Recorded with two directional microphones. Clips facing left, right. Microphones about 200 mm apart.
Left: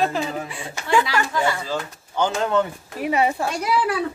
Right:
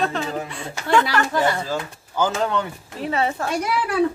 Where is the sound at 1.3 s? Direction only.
45° right (ahead or behind).